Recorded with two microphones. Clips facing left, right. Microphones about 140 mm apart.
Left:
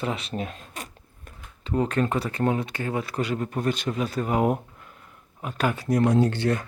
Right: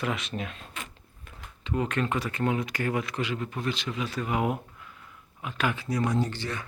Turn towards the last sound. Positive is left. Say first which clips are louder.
# left 8 dB
turn(degrees=60)  # may be behind; listen again after turning